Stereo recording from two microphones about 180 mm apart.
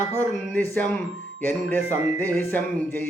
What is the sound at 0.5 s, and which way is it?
Speech, 10° left (ahead or behind).